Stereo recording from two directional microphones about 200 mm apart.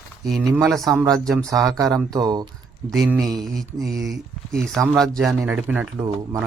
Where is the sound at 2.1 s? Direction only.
20° right (ahead or behind).